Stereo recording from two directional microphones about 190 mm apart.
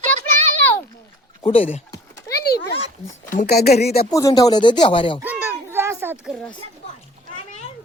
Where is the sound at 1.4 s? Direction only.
30° left (ahead or behind).